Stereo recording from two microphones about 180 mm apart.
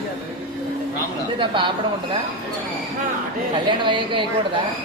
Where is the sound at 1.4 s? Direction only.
25° right (ahead or behind).